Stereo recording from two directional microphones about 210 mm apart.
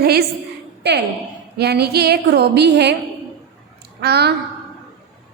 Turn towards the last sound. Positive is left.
turn(degrees=-50)  # may be behind; listen again after turning